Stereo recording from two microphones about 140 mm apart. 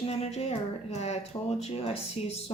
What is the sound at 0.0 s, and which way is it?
Speech, 45° left (ahead or behind).